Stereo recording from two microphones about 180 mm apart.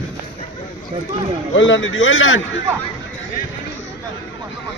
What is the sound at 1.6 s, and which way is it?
Speech, 90° left.